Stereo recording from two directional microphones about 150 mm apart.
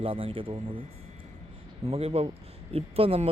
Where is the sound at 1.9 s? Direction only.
40° right (ahead or behind).